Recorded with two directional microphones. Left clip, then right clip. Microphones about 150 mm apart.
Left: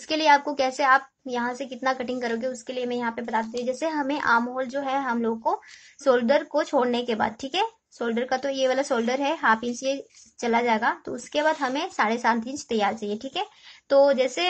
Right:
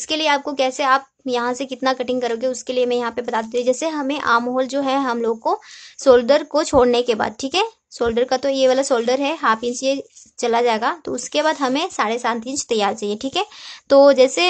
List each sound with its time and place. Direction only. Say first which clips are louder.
0.1 s speech: right 1 dB; 25° right (ahead or behind)
3.9 s a woman's voice: right 4 dB; 30° right (ahead or behind)
4.6 s speech: right 7 dB; 45° right (ahead or behind); by 12.5 s 25° right (ahead or behind)
12.5 s speech: right 6 dB; 40° right (ahead or behind)